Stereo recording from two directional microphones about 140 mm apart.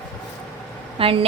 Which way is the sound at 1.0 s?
40° right (ahead or behind).